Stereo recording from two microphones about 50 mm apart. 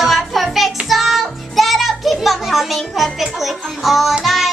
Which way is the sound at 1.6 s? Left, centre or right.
Centre.